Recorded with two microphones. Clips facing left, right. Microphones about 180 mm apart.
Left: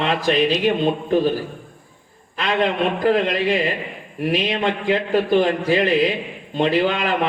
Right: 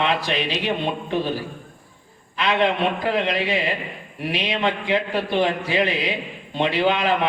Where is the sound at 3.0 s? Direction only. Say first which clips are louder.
Left 7 dB; 45° left (ahead or behind).